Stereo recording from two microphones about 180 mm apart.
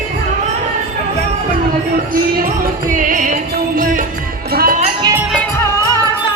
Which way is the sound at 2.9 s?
45° right (ahead or behind).